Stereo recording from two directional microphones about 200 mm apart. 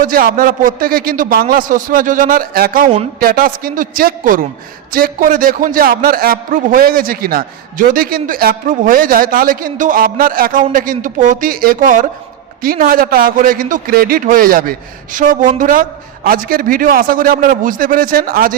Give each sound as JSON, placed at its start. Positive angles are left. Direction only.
{"t": 0.0, "sound": "a man's voice", "side_deg": -45}